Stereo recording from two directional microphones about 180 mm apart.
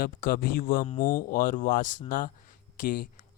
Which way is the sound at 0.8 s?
30° left (ahead or behind).